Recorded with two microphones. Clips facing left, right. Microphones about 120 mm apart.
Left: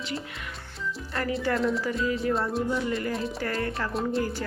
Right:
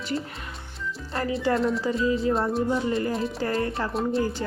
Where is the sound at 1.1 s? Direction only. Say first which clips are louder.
Right 2 dB; 30° right (ahead or behind).